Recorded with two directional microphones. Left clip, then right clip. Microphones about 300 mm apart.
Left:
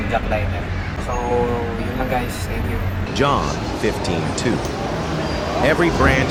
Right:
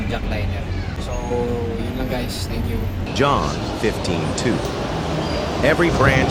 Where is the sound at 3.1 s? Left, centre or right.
Centre.